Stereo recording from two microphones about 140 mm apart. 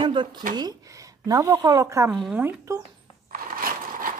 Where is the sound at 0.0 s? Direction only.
35° right (ahead or behind).